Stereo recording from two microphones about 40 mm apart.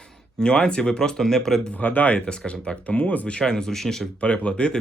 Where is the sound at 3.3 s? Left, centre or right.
Left.